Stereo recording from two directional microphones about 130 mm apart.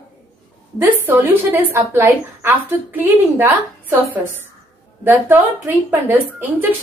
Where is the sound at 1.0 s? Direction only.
15° right (ahead or behind).